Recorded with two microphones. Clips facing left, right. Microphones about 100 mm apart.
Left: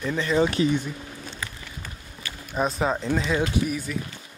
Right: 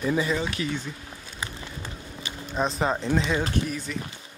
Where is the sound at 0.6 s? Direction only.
25° left (ahead or behind).